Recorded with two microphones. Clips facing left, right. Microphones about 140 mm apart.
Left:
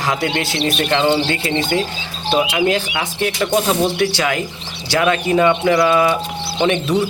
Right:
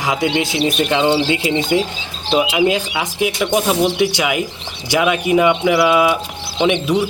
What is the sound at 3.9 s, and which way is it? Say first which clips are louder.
Speech: right 1 dB; 15° right (ahead or behind).